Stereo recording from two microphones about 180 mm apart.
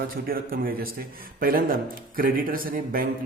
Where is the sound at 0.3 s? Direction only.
55° right (ahead or behind).